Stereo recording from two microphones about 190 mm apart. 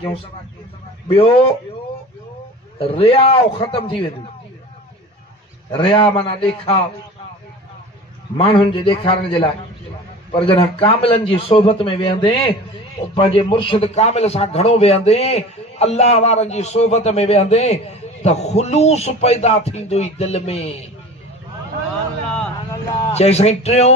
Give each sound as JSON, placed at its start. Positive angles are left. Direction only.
{"t": 1.0, "sound": "a man's voice", "side_deg": 30}
{"t": 2.8, "sound": "a man's voice", "side_deg": 30}
{"t": 5.7, "sound": "a man's voice", "side_deg": 25}
{"t": 8.4, "sound": "a man's voice", "side_deg": 30}
{"t": 23.1, "sound": "a man's voice", "side_deg": 35}